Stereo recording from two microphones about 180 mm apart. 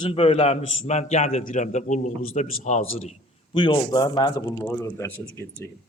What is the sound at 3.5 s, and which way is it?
A man's voice, 25° left (ahead or behind).